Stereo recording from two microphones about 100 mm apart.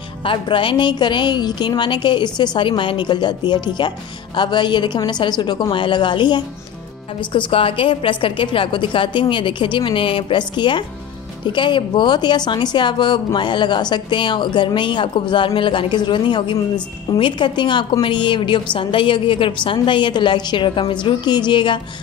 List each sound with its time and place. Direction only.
0.2 s a woman's voice: 60° left (ahead or behind)